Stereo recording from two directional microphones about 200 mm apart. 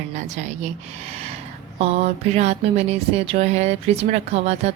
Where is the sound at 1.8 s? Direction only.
30° right (ahead or behind).